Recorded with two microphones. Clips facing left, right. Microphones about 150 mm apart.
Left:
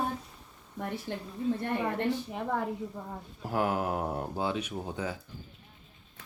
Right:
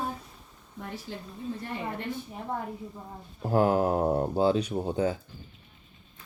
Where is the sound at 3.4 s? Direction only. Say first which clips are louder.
Right 6 dB; 30° right (ahead or behind).